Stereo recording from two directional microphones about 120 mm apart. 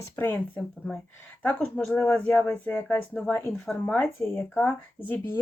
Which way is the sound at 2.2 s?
10° left (ahead or behind).